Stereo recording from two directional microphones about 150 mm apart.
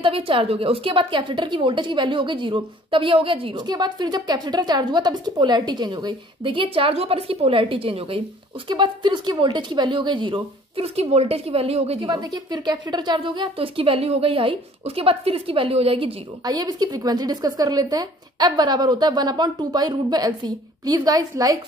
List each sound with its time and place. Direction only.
0.0 s a woman's voice: 35° right (ahead or behind)
12.1 s a woman's voice: 25° right (ahead or behind)
16.4 s a woman's voice: 25° right (ahead or behind)